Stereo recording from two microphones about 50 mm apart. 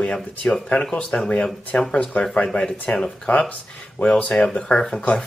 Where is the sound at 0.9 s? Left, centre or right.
Left.